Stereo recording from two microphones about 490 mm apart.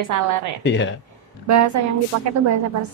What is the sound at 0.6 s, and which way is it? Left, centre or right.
Speech, left.